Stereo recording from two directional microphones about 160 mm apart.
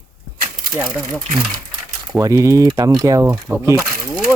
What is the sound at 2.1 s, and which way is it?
Speech, 20° right (ahead or behind).